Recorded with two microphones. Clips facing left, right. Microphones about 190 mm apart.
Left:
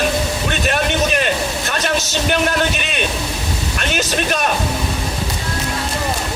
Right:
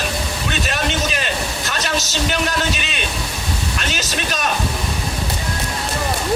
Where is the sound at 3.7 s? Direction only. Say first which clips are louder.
Left 8 dB; 50° left (ahead or behind).